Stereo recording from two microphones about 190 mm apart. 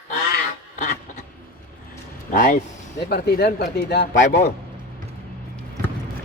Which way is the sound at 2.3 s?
45° left (ahead or behind).